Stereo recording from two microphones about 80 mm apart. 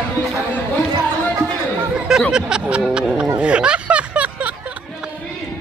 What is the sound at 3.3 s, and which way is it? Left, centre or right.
Snicker, centre.